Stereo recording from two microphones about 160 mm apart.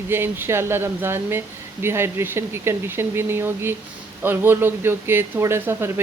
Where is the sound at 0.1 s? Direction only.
15° right (ahead or behind).